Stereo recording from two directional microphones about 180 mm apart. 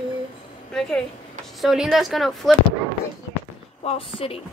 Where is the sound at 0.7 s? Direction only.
5° left (ahead or behind).